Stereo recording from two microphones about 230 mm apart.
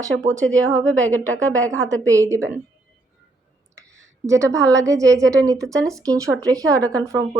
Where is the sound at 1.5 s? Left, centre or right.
Centre.